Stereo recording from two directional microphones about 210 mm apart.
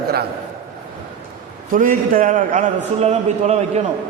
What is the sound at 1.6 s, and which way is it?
A man's voice, 40° right (ahead or behind).